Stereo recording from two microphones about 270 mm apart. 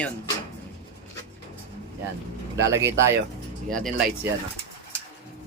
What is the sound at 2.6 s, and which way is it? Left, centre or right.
Speech, centre.